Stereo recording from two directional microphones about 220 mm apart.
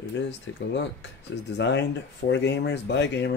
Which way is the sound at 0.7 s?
50° left (ahead or behind).